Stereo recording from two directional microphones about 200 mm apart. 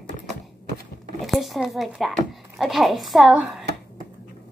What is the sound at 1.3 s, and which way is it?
A child's voice, centre (ahead or behind).